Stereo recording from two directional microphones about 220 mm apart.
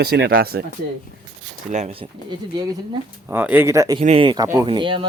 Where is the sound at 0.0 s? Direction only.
50° right (ahead or behind).